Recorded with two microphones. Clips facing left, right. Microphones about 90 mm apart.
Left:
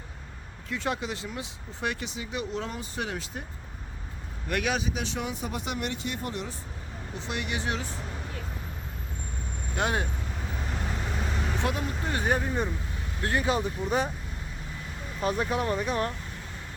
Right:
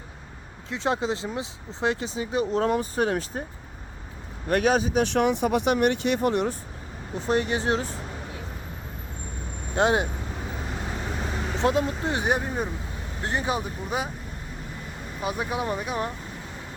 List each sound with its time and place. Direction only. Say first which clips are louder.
0.7 s speech: right 5 dB; 25° right (ahead or behind)
4.4 s speech: right 7 dB; 40° right (ahead or behind)
5.0 s speech: right 11 dB; 65° right (ahead or behind)
7.2 s speech: right 9 dB; 40° right (ahead or behind)
9.7 s speech: right 7 dB; 20° right (ahead or behind)
10.7 s vehicle: right 1 dB; 10° right (ahead or behind)
11.5 s speech: right 10 dB; 25° right (ahead or behind)
13.6 s speech: left 2 dB; 10° right (ahead or behind)
15.2 s speech: left 1 dB; 10° right (ahead or behind)